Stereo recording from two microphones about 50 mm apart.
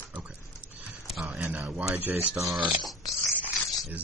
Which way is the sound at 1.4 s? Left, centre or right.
Right.